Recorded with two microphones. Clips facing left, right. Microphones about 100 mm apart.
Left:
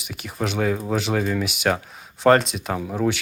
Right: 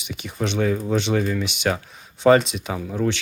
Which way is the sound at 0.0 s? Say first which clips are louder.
Even; centre (ahead or behind).